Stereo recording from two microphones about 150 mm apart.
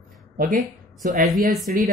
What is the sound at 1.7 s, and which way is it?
Speech, 70° right (ahead or behind).